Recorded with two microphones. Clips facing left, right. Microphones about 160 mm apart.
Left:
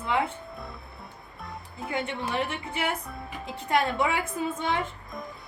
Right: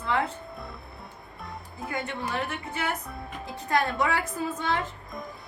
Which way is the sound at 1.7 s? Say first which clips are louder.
Left 2 dB; 25° left (ahead or behind).